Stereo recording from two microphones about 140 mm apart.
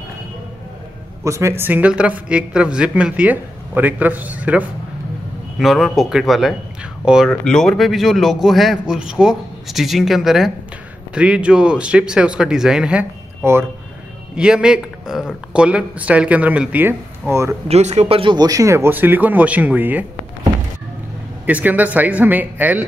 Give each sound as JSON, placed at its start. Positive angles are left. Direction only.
{"t": 1.2, "sound": "a man's voice", "side_deg": -20}
{"t": 13.4, "sound": "speech", "side_deg": -15}
{"t": 14.3, "sound": "a man's voice", "side_deg": -5}
{"t": 17.6, "sound": "a man's voice", "side_deg": -50}
{"t": 21.5, "sound": "a man's voice", "side_deg": -10}